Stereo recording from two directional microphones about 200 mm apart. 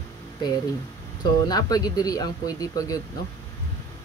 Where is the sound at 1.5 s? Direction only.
20° left (ahead or behind).